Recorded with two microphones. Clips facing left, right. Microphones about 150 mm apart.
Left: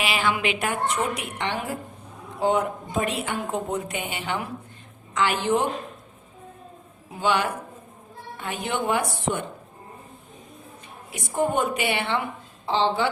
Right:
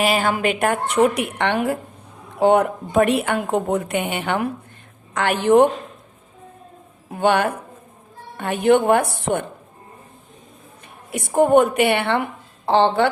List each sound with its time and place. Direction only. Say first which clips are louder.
0.0 s a woman's voice: right 6 dB; 45° right (ahead or behind)
7.1 s a woman's voice: right 6 dB; 55° right (ahead or behind)
11.1 s a woman's voice: right 10 dB; 60° right (ahead or behind)